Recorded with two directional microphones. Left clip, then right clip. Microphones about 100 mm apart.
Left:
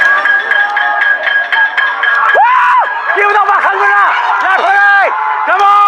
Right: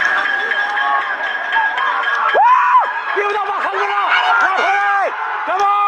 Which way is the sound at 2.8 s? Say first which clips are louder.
Left 7 dB; 30° left (ahead or behind).